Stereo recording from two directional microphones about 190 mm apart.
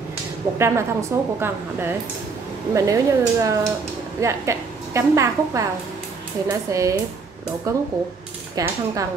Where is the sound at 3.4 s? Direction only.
15° right (ahead or behind).